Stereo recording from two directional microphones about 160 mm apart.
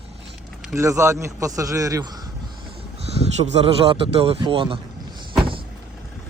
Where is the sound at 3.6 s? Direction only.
35° right (ahead or behind).